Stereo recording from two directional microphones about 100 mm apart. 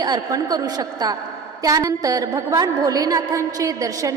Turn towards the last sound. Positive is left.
turn(degrees=-35)  # may be behind; listen again after turning